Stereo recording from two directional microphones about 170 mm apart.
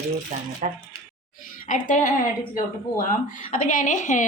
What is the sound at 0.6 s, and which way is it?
Speech, 50° right (ahead or behind).